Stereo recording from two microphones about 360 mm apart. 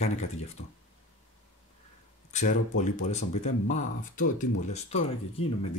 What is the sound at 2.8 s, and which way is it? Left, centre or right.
Speech, centre.